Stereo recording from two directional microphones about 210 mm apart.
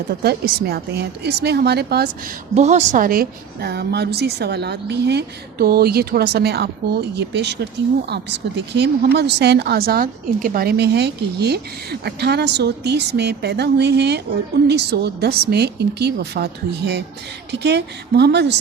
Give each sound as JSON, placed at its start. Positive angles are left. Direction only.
{"t": 0.2, "sound": "a woman's voice", "side_deg": -50}
{"t": 2.6, "sound": "a woman's voice", "side_deg": -35}